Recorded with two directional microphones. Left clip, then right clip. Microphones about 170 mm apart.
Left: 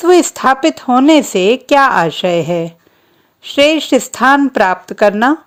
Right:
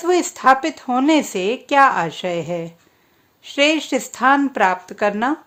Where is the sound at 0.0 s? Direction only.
35° left (ahead or behind).